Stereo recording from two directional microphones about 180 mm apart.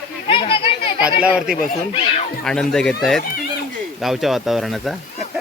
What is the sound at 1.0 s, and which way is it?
Speech, 10° right (ahead or behind).